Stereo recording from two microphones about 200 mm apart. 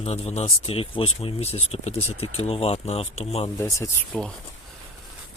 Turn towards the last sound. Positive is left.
turn(degrees=5)  # may be behind; listen again after turning